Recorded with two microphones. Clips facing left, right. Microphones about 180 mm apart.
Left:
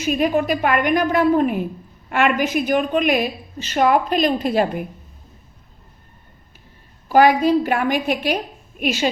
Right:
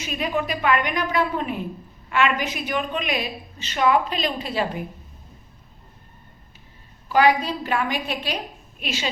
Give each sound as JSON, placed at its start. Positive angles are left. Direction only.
{"t": 0.0, "sound": "a woman's voice", "side_deg": 50}
{"t": 7.1, "sound": "a woman's voice", "side_deg": 50}